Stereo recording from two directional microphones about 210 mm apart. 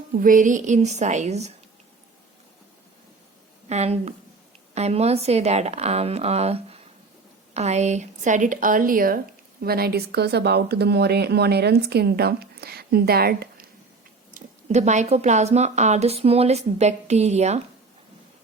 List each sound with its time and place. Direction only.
0.2 s speech: 40° right (ahead or behind)
3.7 s a woman's voice: 30° right (ahead or behind); by 13.7 s 45° right (ahead or behind)
14.3 s speech: 35° right (ahead or behind)